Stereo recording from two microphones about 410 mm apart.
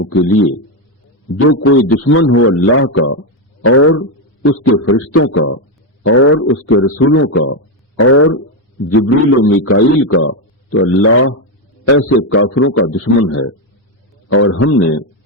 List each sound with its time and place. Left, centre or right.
0.0 s a man's voice: left